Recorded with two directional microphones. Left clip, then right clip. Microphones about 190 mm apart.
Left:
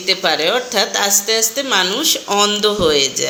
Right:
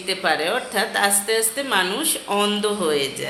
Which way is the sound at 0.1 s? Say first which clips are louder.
Left 6 dB; 25° left (ahead or behind).